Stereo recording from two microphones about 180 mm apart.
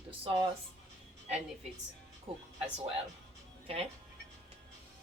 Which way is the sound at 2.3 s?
30° right (ahead or behind).